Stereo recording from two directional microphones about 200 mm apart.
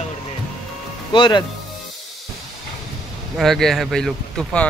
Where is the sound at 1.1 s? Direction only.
25° left (ahead or behind).